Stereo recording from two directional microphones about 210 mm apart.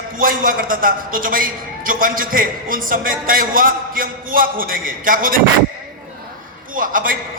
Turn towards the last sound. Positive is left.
turn(degrees=-40)  # may be behind; listen again after turning